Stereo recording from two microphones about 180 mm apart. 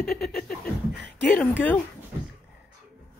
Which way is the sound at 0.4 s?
55° left (ahead or behind).